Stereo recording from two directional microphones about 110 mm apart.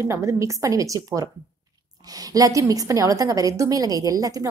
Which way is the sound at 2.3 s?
30° right (ahead or behind).